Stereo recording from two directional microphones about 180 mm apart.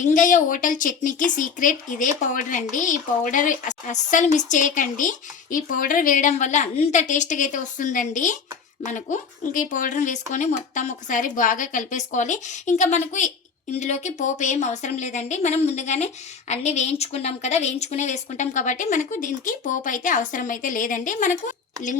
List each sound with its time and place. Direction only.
0.0 s a woman's voice: 45° left (ahead or behind)